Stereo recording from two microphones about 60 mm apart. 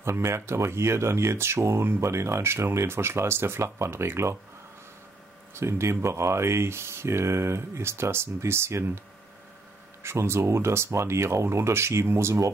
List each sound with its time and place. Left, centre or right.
0.0 s speech: right
5.5 s speech: right
10.0 s speech: right